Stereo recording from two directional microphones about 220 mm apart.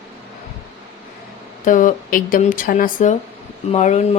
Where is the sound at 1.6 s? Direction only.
35° left (ahead or behind).